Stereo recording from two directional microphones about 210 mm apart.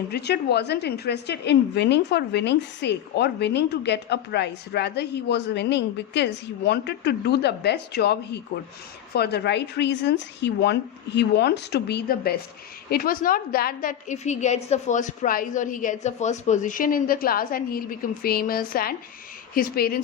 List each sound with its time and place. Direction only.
0.1 s a woman's voice: 50° left (ahead or behind)